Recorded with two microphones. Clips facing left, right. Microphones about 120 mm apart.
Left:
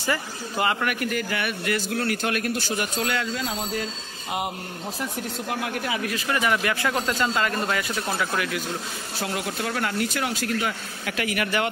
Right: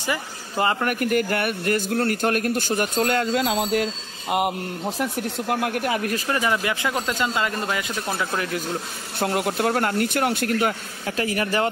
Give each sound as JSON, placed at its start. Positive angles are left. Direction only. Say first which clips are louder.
{"t": 0.6, "sound": "speech", "louder": "right 2 dB", "side_deg": -30}
{"t": 0.9, "sound": "a man's voice", "louder": "right 5 dB", "side_deg": -50}
{"t": 3.3, "sound": "speech", "louder": "right 7 dB", "side_deg": -70}
{"t": 5.5, "sound": "a man's voice", "louder": "right 5 dB", "side_deg": -55}
{"t": 6.2, "sound": "speech", "louder": "left 2 dB", "side_deg": -25}
{"t": 9.2, "sound": "a man's voice", "louder": "right 7 dB", "side_deg": -55}
{"t": 11.1, "sound": "speech", "louder": "right 3 dB", "side_deg": -30}